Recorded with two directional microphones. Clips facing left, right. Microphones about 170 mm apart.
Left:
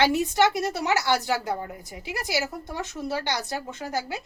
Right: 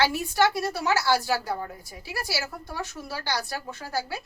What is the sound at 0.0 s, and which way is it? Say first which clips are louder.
Speech: left 2 dB; 20° left (ahead or behind).